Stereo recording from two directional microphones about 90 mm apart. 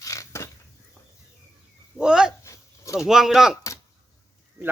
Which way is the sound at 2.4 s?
35° left (ahead or behind).